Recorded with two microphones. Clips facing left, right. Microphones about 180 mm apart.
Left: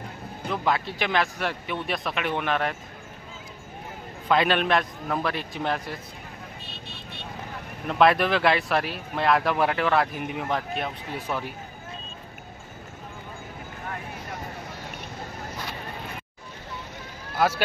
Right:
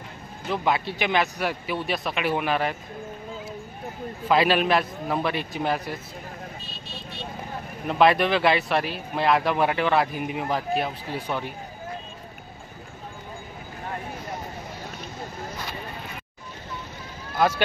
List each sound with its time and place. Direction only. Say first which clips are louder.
0.5 s speech: right 1 dB; 5° right (ahead or behind)
4.3 s speech: right 2 dB; 5° right (ahead or behind)
6.6 s vehicle: right 1 dB; 60° left (ahead or behind)
7.9 s speech: right 1 dB; centre (ahead or behind)
17.4 s speech: right 1 dB; 5° left (ahead or behind)